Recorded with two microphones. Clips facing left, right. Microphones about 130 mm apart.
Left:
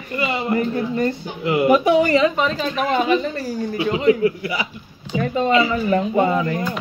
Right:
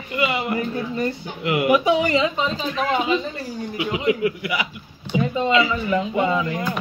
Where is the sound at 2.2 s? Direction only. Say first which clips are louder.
Left 4 dB; 60° left (ahead or behind).